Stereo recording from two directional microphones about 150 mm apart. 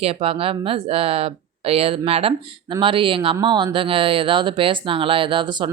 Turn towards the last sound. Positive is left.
turn(degrees=-30)  # may be behind; listen again after turning